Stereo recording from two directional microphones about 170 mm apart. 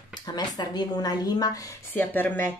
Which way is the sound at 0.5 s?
25° left (ahead or behind).